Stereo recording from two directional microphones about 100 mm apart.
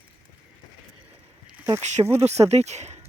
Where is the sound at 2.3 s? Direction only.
90° right.